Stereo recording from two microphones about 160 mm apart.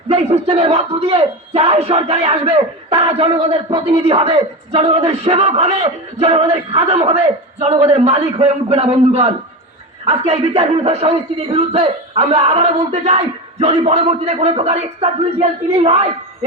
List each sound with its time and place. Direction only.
0.1 s a man's voice: 40° right (ahead or behind)